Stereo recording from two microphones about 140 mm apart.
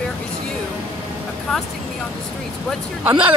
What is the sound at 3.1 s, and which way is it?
Speech, 35° right (ahead or behind).